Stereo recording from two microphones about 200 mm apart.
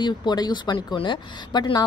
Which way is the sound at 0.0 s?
20° left (ahead or behind).